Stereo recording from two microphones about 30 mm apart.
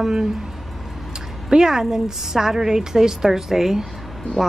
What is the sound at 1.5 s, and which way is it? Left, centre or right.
Speech, centre.